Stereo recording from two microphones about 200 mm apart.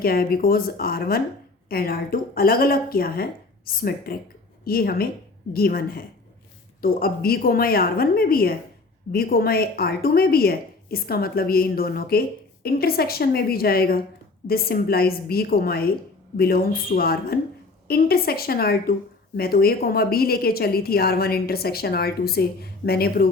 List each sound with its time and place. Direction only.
0.0 s a woman's voice: 50° left (ahead or behind)